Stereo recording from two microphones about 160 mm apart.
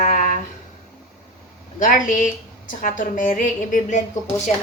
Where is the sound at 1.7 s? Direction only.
55° left (ahead or behind).